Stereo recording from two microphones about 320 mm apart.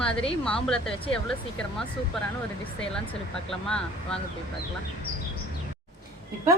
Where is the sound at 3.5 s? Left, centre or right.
Centre.